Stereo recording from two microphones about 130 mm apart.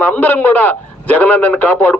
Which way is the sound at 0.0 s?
15° left (ahead or behind).